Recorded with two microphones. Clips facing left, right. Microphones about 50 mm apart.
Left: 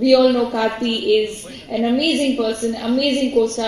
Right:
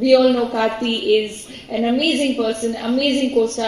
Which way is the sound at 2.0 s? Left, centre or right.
Right.